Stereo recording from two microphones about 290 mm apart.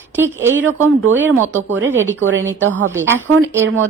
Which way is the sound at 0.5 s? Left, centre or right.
Right.